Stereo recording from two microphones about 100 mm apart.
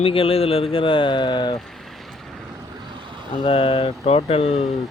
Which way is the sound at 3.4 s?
65° left (ahead or behind).